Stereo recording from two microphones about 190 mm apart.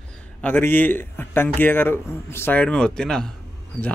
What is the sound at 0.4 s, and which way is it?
Speech, 10° left (ahead or behind).